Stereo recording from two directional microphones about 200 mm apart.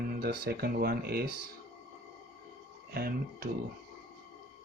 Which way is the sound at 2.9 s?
50° right (ahead or behind).